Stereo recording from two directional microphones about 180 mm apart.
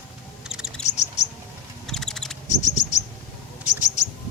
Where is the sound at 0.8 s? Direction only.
40° left (ahead or behind).